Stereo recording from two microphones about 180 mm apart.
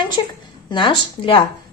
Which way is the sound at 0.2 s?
25° left (ahead or behind).